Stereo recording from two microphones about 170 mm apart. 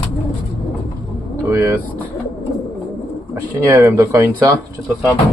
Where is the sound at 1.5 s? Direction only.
10° right (ahead or behind).